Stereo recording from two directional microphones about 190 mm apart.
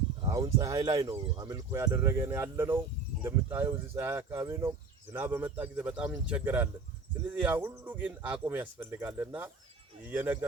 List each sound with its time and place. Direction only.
0.3 s speech: 15° right (ahead or behind)